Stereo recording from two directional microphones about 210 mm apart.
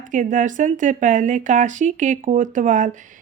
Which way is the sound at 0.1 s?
35° right (ahead or behind).